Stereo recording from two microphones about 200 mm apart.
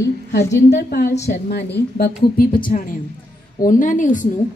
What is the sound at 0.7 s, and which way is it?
A woman's voice, 55° left (ahead or behind).